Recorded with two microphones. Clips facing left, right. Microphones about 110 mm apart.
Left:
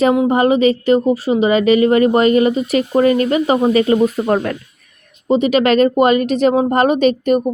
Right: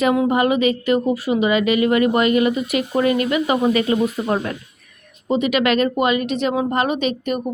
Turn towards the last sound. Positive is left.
turn(degrees=40)  # may be behind; listen again after turning